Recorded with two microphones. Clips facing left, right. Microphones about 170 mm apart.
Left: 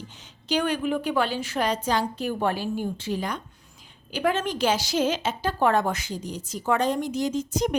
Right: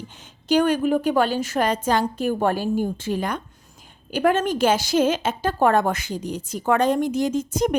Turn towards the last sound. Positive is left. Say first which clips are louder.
# right 3 dB
turn(degrees=-50)  # may be behind; listen again after turning